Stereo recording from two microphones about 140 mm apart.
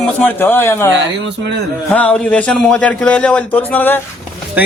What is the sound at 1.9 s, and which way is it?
A man's voice, 10° left (ahead or behind).